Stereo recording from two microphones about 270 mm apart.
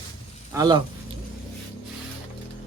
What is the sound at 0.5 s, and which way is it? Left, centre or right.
Speech, centre.